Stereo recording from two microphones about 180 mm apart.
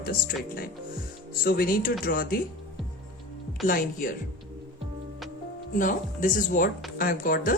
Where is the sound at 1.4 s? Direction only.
55° left (ahead or behind).